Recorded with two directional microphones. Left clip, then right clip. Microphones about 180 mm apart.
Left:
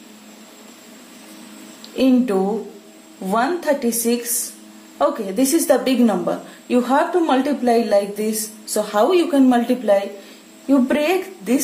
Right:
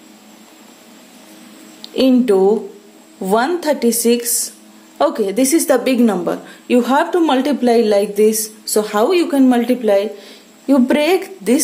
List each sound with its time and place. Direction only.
1.8 s a woman's voice: 50° right (ahead or behind)
10.7 s a woman's voice: 50° right (ahead or behind)